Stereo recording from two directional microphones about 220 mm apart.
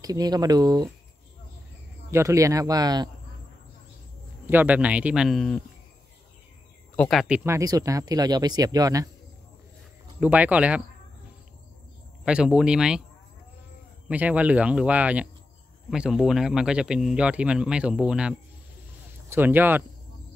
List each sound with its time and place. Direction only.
0.0 s speech: 15° right (ahead or behind)
2.0 s speech: 15° right (ahead or behind)
4.5 s speech: 10° right (ahead or behind)
7.0 s speech: centre (ahead or behind); by 9.1 s 15° right (ahead or behind)
10.2 s speech: 5° right (ahead or behind)
12.3 s speech: 5° right (ahead or behind)
14.0 s speech: 5° right (ahead or behind)